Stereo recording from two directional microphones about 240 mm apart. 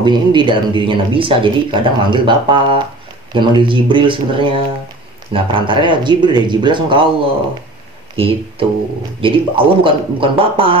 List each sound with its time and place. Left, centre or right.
0.0 s speech: centre